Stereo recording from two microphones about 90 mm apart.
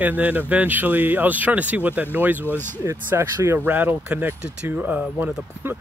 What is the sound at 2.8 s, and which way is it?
Speech, 30° right (ahead or behind).